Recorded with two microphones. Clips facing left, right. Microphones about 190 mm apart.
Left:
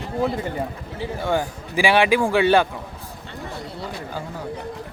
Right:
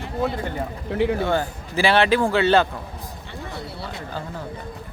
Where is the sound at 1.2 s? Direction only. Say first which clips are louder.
Even; 15° left (ahead or behind).